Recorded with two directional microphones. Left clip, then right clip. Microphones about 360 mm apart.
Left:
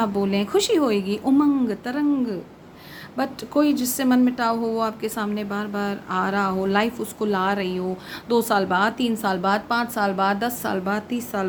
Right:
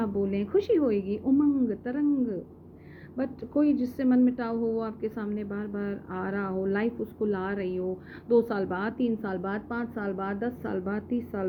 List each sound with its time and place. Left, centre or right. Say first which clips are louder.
0.0 s a woman's voice: left 7 dB; centre
3.2 s a woman's voice: left 6 dB; centre